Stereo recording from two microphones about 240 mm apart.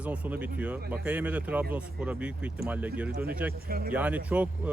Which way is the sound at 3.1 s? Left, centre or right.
Right.